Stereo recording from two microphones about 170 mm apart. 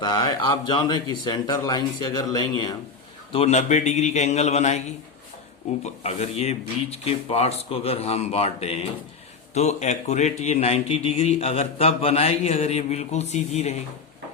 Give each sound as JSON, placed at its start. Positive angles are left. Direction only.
{"t": 0.0, "sound": "a man's voice", "side_deg": 20}
{"t": 3.3, "sound": "a man's voice", "side_deg": 40}
{"t": 5.8, "sound": "a man's voice", "side_deg": 40}